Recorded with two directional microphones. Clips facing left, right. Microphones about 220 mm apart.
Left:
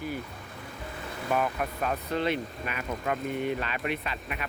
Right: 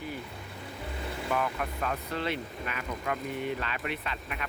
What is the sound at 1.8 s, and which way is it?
Speech, 20° left (ahead or behind).